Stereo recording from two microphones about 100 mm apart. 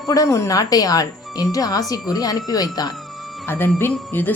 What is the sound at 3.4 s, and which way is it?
Speech, 25° left (ahead or behind).